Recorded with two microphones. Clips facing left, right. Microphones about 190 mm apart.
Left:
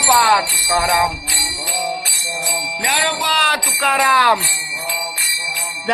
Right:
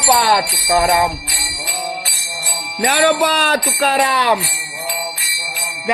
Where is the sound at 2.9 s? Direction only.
50° right (ahead or behind); by 4.4 s 25° right (ahead or behind).